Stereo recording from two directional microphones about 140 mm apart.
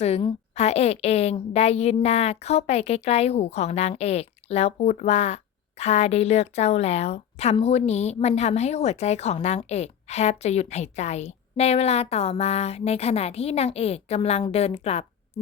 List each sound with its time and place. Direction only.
0.5 s a woman's voice: 50° left (ahead or behind)